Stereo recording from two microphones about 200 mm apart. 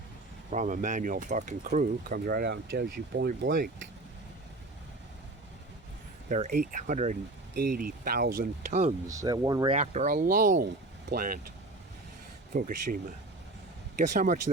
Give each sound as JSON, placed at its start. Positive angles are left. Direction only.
{"t": 0.5, "sound": "speech", "side_deg": -40}
{"t": 6.2, "sound": "speech", "side_deg": -40}
{"t": 9.0, "sound": "speech", "side_deg": -20}
{"t": 9.7, "sound": "speech", "side_deg": -35}
{"t": 12.5, "sound": "speech", "side_deg": -45}
{"t": 14.0, "sound": "speech", "side_deg": -40}